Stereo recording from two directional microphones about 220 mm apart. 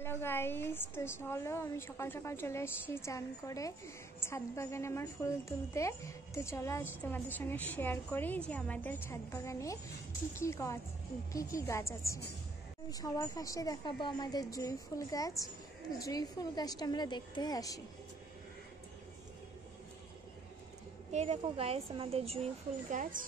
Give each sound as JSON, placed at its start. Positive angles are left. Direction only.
{"t": 0.0, "sound": "a woman's voice", "side_deg": 10}
{"t": 21.1, "sound": "a woman's voice", "side_deg": -30}